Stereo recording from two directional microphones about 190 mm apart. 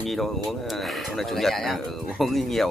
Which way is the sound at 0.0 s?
Centre (ahead or behind).